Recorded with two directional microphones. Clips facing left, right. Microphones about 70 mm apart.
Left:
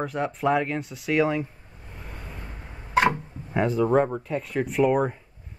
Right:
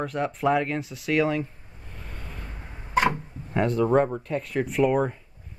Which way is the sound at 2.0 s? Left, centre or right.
Centre.